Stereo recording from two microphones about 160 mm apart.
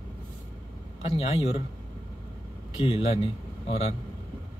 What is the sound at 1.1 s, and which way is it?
Speech, 40° left (ahead or behind).